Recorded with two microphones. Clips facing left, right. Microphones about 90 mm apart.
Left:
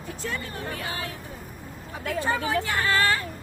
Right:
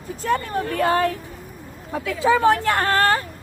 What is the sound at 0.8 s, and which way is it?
Speech, 60° right (ahead or behind).